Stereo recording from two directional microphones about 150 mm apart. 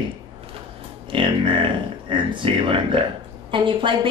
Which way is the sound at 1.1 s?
35° right (ahead or behind).